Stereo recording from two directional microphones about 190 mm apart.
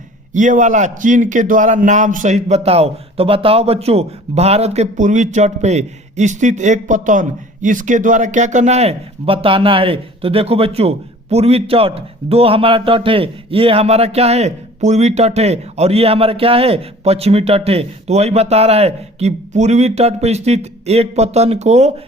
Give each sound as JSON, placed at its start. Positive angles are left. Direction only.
{"t": 0.3, "sound": "a man's voice", "side_deg": -40}